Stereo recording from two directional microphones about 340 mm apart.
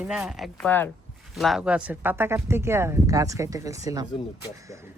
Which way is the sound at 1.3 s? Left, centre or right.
Centre.